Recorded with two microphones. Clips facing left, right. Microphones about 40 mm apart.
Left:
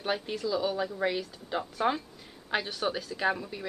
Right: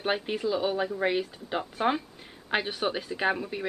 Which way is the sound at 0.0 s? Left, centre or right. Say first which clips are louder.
Right 3 dB; right.